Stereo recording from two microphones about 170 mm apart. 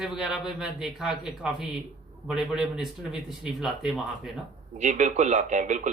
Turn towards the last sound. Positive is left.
turn(degrees=-45)  # may be behind; listen again after turning